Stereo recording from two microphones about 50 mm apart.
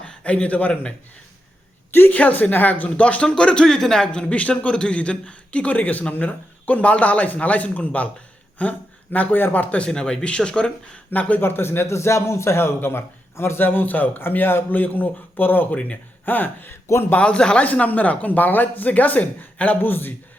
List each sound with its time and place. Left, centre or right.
0.0 s a man's voice: centre
1.9 s a woman's voice: left
2.1 s a man's voice: left
9.7 s speech: centre
11.1 s speech: left
11.4 s a man's voice: left
11.9 s a man's voice: left
17.2 s a man's voice: left
17.7 s speech: left